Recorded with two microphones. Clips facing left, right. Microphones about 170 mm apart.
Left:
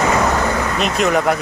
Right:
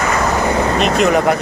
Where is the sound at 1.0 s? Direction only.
Centre (ahead or behind).